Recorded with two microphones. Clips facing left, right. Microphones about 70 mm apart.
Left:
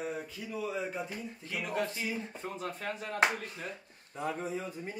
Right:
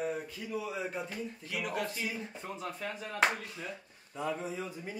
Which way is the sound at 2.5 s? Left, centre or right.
Left.